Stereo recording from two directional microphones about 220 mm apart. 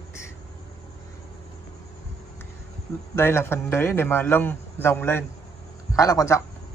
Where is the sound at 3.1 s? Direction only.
10° left (ahead or behind).